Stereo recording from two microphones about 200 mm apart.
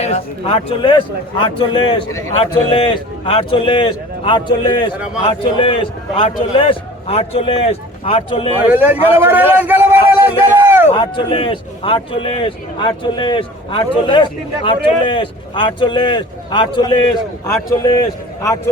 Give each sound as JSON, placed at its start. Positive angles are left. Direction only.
{"t": 0.0, "sound": "a man's voice", "side_deg": 30}
{"t": 8.7, "sound": "speech", "side_deg": -10}
{"t": 9.1, "sound": "a sound", "side_deg": -10}
{"t": 10.9, "sound": "a man's voice", "side_deg": 25}
{"t": 18.4, "sound": "a man's voice", "side_deg": 15}